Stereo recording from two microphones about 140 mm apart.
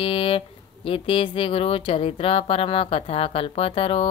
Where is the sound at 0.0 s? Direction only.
40° left (ahead or behind).